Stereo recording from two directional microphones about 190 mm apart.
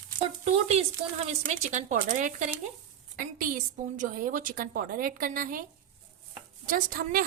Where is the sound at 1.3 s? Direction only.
40° right (ahead or behind).